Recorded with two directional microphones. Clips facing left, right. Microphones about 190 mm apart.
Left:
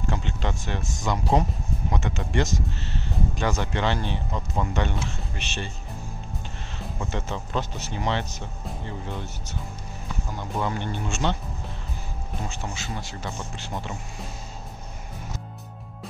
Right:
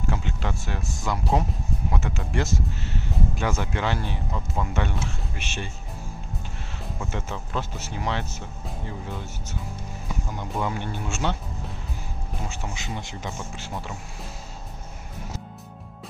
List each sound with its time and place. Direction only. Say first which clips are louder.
0.1 s speech: left 1 dB; 5° right (ahead or behind)
7.0 s speech: left 2 dB; 5° right (ahead or behind)
12.4 s speech: even; 10° right (ahead or behind)
13.4 s speech: left 1 dB; 5° right (ahead or behind)